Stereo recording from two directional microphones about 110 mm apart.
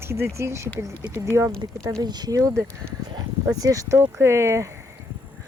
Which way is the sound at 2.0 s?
40° right (ahead or behind).